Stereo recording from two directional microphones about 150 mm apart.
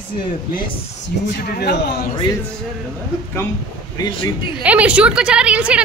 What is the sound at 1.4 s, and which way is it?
Speech, 90° left.